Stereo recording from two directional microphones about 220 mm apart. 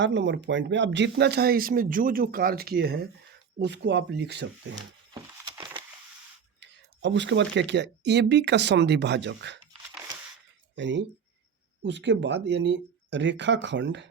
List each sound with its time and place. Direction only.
0.0 s speech: 55° right (ahead or behind)
5.5 s wood: 20° right (ahead or behind)
6.6 s speech: 55° right (ahead or behind)
10.8 s speech: 55° right (ahead or behind)